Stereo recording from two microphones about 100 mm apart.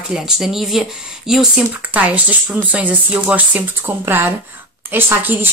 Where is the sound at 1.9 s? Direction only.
15° right (ahead or behind).